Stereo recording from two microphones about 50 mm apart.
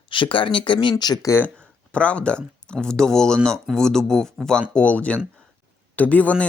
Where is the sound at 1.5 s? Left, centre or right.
Left.